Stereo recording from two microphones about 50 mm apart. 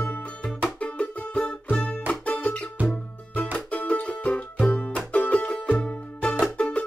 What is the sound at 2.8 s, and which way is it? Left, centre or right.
Music, left.